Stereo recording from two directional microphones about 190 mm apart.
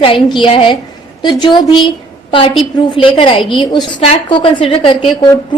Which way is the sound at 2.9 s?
25° left (ahead or behind).